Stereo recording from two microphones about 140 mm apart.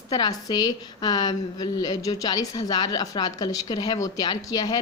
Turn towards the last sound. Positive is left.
turn(degrees=30)  # may be behind; listen again after turning